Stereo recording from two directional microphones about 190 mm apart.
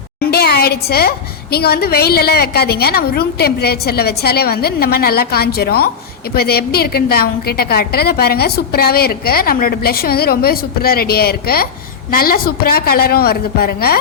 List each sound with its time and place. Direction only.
0.2 s a woman's voice: 55° left (ahead or behind)